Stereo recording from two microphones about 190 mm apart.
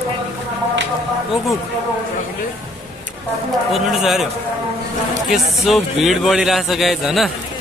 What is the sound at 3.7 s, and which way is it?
Speech, centre (ahead or behind).